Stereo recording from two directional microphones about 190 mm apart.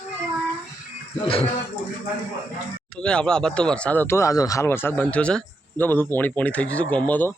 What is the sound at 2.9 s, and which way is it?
Speech, 5° left (ahead or behind).